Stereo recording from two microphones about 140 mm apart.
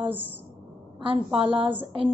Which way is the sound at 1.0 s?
40° right (ahead or behind).